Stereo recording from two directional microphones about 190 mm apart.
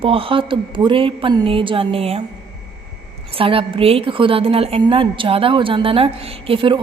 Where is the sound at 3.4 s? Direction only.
30° right (ahead or behind).